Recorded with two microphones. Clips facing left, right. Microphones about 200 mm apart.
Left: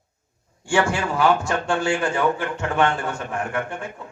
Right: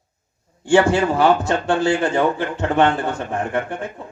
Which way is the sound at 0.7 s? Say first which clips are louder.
Right 6 dB; 35° right (ahead or behind).